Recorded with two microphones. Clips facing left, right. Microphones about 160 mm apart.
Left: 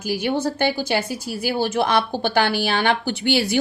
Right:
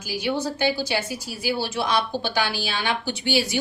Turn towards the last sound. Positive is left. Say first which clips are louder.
# left 3 dB
turn(degrees=60)  # may be behind; listen again after turning